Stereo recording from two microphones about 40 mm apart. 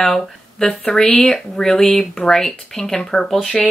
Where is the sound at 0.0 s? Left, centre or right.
Centre.